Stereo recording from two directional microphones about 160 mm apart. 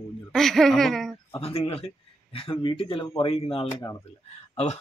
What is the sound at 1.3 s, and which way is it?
Speech, 35° left (ahead or behind).